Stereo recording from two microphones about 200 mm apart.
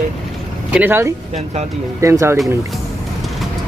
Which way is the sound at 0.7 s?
10° right (ahead or behind).